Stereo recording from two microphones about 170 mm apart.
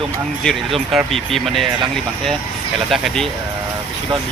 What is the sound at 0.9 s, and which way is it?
Speech, centre (ahead or behind).